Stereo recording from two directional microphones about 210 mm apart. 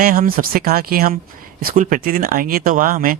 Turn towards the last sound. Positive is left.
turn(degrees=-40)  # may be behind; listen again after turning